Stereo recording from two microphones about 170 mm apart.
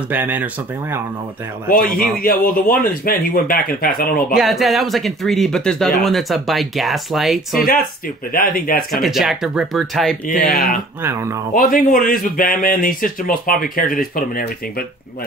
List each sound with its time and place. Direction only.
0.1 s speech: 10° right (ahead or behind)
1.7 s speech: 60° left (ahead or behind)
4.4 s speech: centre (ahead or behind)
8.3 s speech: 55° left (ahead or behind)
9.0 s speech: centre (ahead or behind)
11.0 s speech: 15° right (ahead or behind)
11.5 s speech: 55° left (ahead or behind)